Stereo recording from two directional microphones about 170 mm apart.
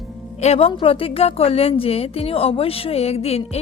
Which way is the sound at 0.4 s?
35° left (ahead or behind).